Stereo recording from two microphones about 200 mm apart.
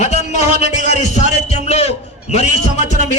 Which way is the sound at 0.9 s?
35° left (ahead or behind).